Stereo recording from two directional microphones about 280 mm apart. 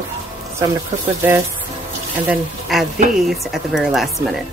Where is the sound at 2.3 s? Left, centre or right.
Centre.